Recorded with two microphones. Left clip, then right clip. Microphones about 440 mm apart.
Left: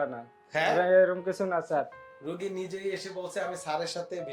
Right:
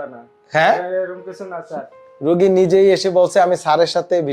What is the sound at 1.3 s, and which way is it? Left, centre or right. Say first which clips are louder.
Speech: right 1 dB; left.